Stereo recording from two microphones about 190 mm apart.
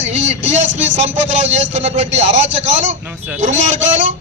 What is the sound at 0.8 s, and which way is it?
Speech, 75° right (ahead or behind).